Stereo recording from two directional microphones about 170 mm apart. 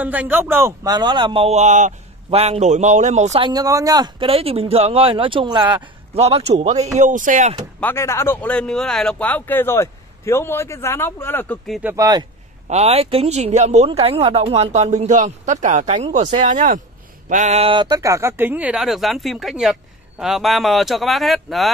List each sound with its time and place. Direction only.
0.0 s speech: 10° right (ahead or behind); by 3.4 s 40° right (ahead or behind)
3.4 s speech: 20° right (ahead or behind)
6.1 s speech: 40° right (ahead or behind)
7.8 s speech: 15° left (ahead or behind)
11.8 s speech: 20° right (ahead or behind)
12.6 s speech: 40° right (ahead or behind); by 21.7 s centre (ahead or behind)